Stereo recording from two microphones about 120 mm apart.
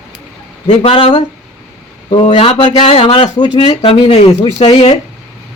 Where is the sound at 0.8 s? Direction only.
55° left (ahead or behind).